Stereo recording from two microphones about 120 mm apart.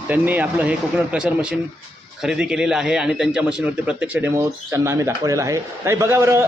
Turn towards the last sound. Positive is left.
turn(degrees=-20)  # may be behind; listen again after turning